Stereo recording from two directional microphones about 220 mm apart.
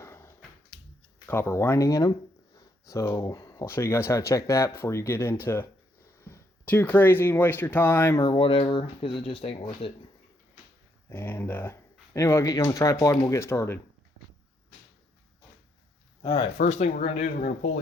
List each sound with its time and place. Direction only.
0.0 s dog: 10° left (ahead or behind)
1.3 s speech: 10° left (ahead or behind)
8.3 s speech: 25° left (ahead or behind)
11.1 s speech: 10° left (ahead or behind)
16.2 s speech: 20° left (ahead or behind)